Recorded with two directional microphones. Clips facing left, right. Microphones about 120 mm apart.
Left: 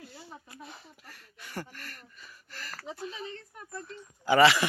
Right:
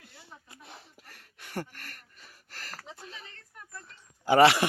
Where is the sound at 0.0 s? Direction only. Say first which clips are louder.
Left 7 dB; 60° right (ahead or behind).